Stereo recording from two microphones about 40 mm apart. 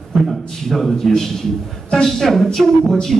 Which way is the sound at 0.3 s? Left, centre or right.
Centre.